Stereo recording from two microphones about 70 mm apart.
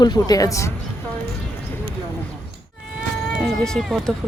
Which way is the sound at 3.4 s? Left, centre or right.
Centre.